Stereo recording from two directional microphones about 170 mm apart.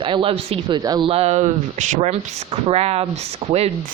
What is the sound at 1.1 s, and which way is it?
Speech, 40° right (ahead or behind).